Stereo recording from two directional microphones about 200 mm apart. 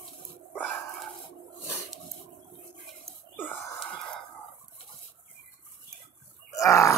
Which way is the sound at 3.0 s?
Centre (ahead or behind).